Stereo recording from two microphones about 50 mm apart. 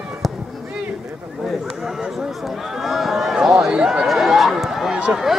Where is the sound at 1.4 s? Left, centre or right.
Centre.